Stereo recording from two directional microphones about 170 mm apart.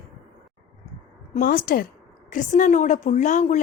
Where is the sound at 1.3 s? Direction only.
55° left (ahead or behind).